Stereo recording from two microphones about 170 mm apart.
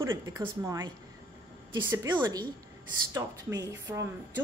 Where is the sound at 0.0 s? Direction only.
15° right (ahead or behind).